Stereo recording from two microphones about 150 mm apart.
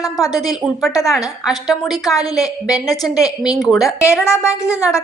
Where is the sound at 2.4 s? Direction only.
25° left (ahead or behind).